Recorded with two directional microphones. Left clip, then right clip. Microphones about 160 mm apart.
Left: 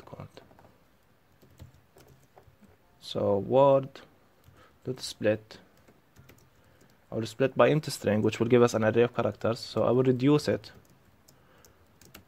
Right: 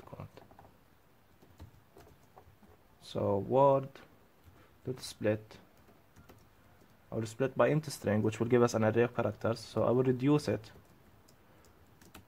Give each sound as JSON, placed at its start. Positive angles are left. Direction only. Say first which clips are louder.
{"t": 0.0, "sound": "mechanisms", "louder": "left 3 dB", "side_deg": 20}
{"t": 3.0, "sound": "speech", "louder": "left 5 dB", "side_deg": 20}
{"t": 7.1, "sound": "speech", "louder": "left 6 dB", "side_deg": 20}